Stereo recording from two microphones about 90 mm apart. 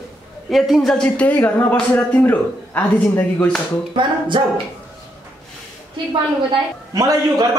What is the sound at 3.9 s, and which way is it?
Music, 65° right (ahead or behind).